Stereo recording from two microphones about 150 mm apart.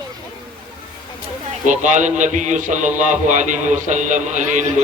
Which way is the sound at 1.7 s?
55° right (ahead or behind).